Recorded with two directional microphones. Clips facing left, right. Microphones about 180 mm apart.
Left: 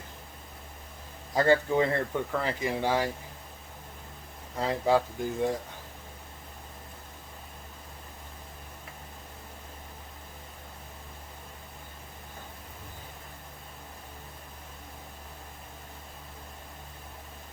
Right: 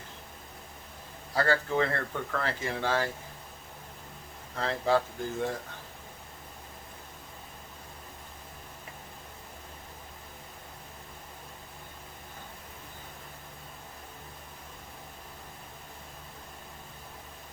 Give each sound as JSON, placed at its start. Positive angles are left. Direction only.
{"t": 1.3, "sound": "speech", "side_deg": 20}
{"t": 4.5, "sound": "speech", "side_deg": 15}